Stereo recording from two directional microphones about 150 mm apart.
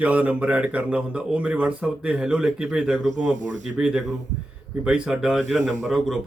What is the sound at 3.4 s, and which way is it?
Speech, 55° right (ahead or behind).